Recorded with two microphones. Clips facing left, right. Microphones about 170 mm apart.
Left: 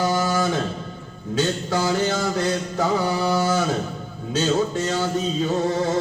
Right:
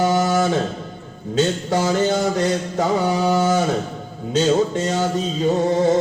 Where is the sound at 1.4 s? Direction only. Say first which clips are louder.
Right 3 dB; 25° right (ahead or behind).